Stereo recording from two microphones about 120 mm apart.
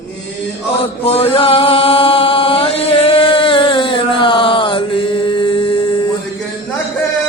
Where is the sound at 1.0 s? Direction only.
55° left (ahead or behind).